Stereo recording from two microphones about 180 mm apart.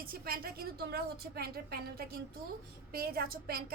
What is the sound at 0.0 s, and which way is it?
A woman's voice, 55° right (ahead or behind).